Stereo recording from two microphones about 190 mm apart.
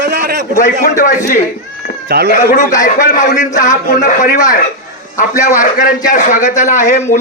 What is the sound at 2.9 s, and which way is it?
A man's voice, 40° left (ahead or behind).